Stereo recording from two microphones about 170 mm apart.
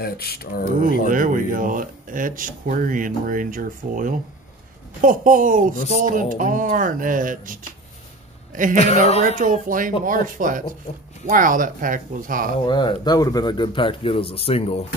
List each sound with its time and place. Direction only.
0.0 s speech: 65° left (ahead or behind)
1.0 s speech: 55° right (ahead or behind)
9.2 s speech: 50° right (ahead or behind)
12.6 s speech: 25° left (ahead or behind)